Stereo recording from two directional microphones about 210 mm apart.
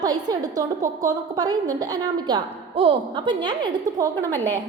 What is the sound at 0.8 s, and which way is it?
Speech, 40° right (ahead or behind).